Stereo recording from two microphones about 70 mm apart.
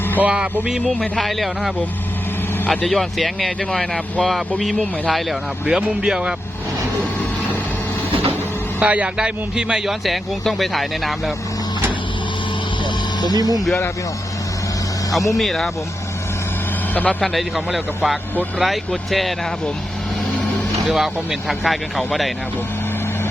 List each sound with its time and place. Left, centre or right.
0.2 s a man's voice: centre
0.7 s a man's voice: centre
8.8 s a man's voice: centre
13.3 s speech: right
15.4 s speech: centre
16.9 s speech: left
17.2 s speech: centre
20.9 s speech: centre